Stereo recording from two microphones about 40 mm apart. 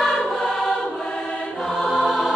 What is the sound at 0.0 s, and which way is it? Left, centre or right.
Choir, centre.